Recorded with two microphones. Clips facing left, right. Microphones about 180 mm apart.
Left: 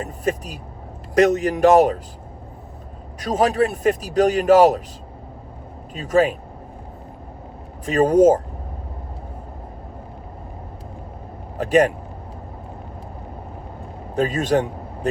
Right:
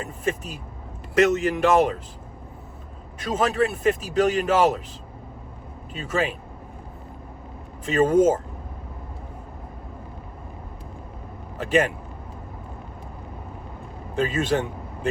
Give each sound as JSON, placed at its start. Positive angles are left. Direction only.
{"t": 0.0, "sound": "speech", "side_deg": 40}
{"t": 3.2, "sound": "speech", "side_deg": 40}
{"t": 5.9, "sound": "speech", "side_deg": 40}
{"t": 7.9, "sound": "speech", "side_deg": 40}
{"t": 11.5, "sound": "speech", "side_deg": 40}
{"t": 14.2, "sound": "speech", "side_deg": 40}